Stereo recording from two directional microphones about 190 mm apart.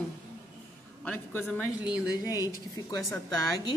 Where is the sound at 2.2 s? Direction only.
20° left (ahead or behind).